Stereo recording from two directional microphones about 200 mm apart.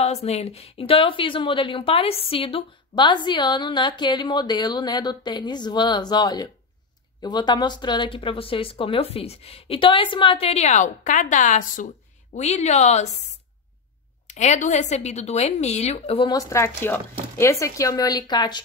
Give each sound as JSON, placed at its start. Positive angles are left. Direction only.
{"t": 0.0, "sound": "a woman's voice", "side_deg": 30}
{"t": 14.2, "sound": "a woman's voice", "side_deg": 35}